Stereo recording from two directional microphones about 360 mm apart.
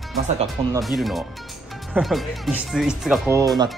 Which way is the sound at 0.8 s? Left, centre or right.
Centre.